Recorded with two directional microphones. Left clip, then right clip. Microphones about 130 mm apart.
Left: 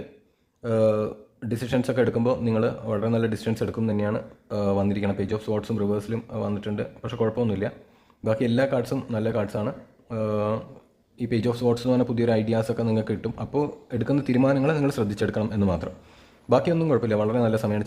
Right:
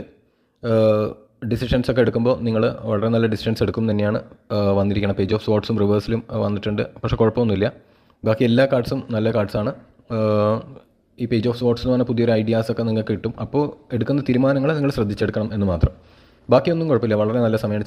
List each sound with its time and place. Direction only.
0.6 s speech: 25° right (ahead or behind)
8.2 s speech: 30° right (ahead or behind)
11.2 s speech: 20° right (ahead or behind)